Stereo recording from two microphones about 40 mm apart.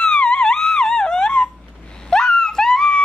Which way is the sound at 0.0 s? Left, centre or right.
Left.